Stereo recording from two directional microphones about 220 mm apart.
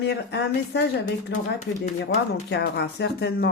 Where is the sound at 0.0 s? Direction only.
50° left (ahead or behind).